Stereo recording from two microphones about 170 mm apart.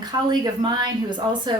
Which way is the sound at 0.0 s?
25° right (ahead or behind).